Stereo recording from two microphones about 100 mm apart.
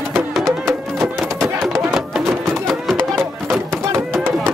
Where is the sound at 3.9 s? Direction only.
25° right (ahead or behind).